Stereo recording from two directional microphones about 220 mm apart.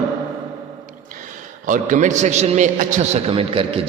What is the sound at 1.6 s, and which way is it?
A man's voice, 35° right (ahead or behind).